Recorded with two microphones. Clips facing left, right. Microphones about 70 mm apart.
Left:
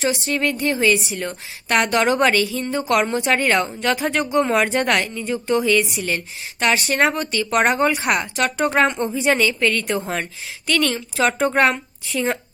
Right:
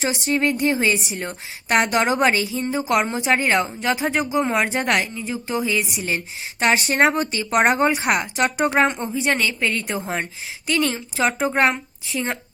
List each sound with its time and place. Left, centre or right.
0.1 s a woman's voice: right
1.8 s a woman's voice: centre
4.2 s a woman's voice: centre
6.8 s a woman's voice: right
8.7 s a woman's voice: centre
11.2 s a woman's voice: centre